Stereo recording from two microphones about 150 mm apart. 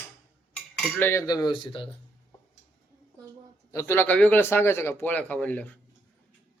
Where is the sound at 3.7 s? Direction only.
20° left (ahead or behind).